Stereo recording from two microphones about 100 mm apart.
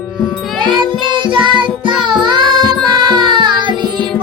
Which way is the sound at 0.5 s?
50° right (ahead or behind).